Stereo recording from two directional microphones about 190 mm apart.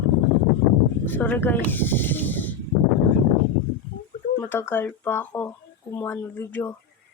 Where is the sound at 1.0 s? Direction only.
10° left (ahead or behind).